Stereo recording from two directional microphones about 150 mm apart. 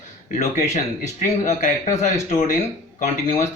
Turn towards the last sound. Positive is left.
turn(degrees=50)  # may be behind; listen again after turning